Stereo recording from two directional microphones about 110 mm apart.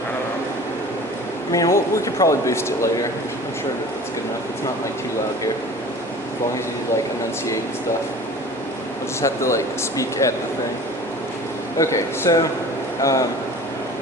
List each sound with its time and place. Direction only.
1.5 s a man's voice: 30° left (ahead or behind)
9.2 s a man's voice: 25° left (ahead or behind)
11.8 s a man's voice: 25° left (ahead or behind)